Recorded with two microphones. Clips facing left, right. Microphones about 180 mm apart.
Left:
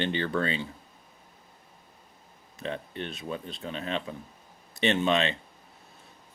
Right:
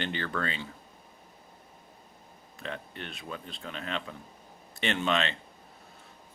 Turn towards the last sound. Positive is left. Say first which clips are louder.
# left 4 dB
turn(degrees=20)  # may be behind; listen again after turning